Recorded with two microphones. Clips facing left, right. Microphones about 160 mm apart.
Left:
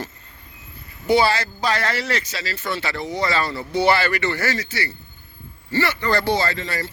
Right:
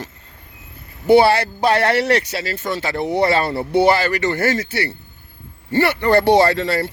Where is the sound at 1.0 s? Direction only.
60° right (ahead or behind).